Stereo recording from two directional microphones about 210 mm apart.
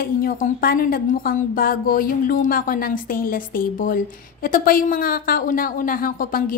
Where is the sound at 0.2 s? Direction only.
45° left (ahead or behind).